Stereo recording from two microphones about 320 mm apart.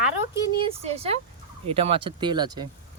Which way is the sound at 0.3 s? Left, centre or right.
Centre.